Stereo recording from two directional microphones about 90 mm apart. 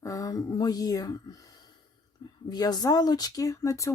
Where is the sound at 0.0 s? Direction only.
40° left (ahead or behind).